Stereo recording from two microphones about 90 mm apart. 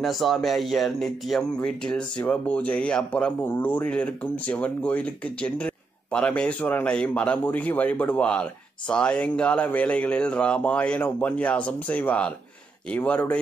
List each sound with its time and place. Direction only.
0.0 s speech: centre (ahead or behind); by 13.4 s 15° left (ahead or behind)